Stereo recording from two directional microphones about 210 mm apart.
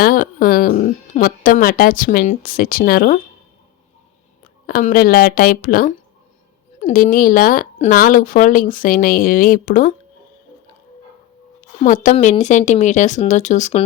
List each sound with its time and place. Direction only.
0.0 s speech: 40° left (ahead or behind)
4.6 s a woman's voice: 40° left (ahead or behind)
11.8 s a woman's voice: 35° left (ahead or behind)